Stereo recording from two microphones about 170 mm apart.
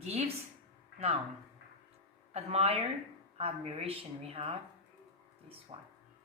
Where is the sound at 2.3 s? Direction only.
35° right (ahead or behind).